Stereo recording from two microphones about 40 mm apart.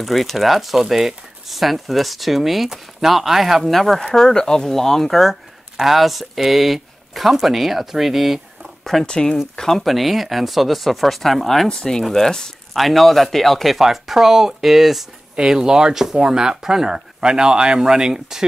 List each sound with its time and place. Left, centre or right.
0.0 s speech: centre
3.6 s speech: centre
9.0 s speech: left
9.6 s speech: centre
9.9 s speech: centre
12.7 s speech: centre
13.7 s speech: centre
15.3 s speech: centre